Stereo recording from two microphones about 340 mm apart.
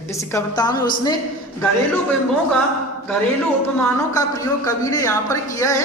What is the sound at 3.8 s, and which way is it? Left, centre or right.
Speech, centre.